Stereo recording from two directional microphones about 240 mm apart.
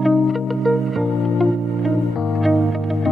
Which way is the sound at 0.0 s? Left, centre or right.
Centre.